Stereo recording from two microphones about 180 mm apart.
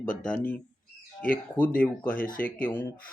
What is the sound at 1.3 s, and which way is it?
Speech, 10° left (ahead or behind).